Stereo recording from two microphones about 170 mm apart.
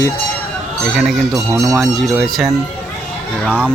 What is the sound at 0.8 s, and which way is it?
Speech, 5° right (ahead or behind).